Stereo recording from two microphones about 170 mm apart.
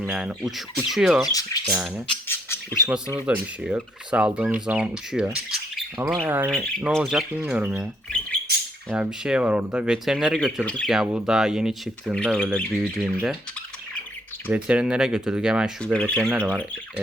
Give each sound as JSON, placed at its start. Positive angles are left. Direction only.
{"t": 0.1, "sound": "speech", "side_deg": -5}
{"t": 1.3, "sound": "speech", "side_deg": 20}
{"t": 1.6, "sound": "speech", "side_deg": -5}
{"t": 2.2, "sound": "speech", "side_deg": 15}
{"t": 3.1, "sound": "speech", "side_deg": -5}
{"t": 6.5, "sound": "speech", "side_deg": 0}
{"t": 8.9, "sound": "speech", "side_deg": -5}
{"t": 13.0, "sound": "speech", "side_deg": -5}
{"t": 14.5, "sound": "speech", "side_deg": -5}
{"t": 15.8, "sound": "speech", "side_deg": 5}
{"t": 16.3, "sound": "speech", "side_deg": -10}